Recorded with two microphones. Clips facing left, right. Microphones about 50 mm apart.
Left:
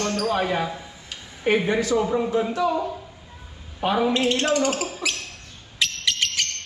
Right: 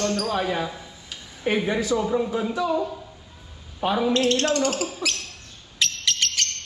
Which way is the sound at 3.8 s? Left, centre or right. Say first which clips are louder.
Even; centre.